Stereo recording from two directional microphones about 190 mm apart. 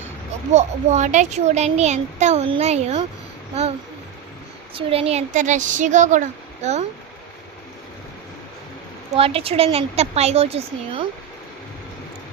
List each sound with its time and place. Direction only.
0.5 s a child's voice: 40° right (ahead or behind)
4.7 s a child's voice: 30° right (ahead or behind)
9.1 s a child's voice: 30° right (ahead or behind)